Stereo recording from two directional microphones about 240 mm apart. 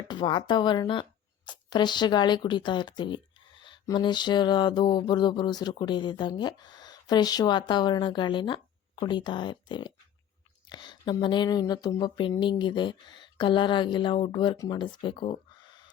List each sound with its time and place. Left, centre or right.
0.1 s speech: centre